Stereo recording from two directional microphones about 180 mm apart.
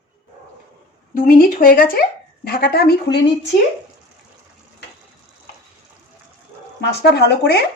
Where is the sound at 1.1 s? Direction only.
50° left (ahead or behind).